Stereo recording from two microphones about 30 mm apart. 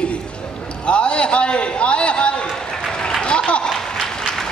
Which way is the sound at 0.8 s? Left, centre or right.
Left.